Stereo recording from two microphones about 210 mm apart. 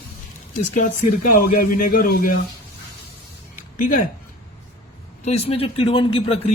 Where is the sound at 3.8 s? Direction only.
40° left (ahead or behind).